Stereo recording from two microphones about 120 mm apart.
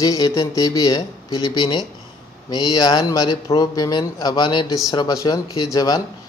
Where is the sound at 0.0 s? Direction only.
30° left (ahead or behind).